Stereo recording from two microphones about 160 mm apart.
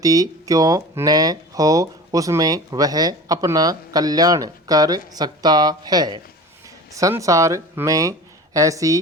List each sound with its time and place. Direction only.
0.0 s speech: 20° right (ahead or behind)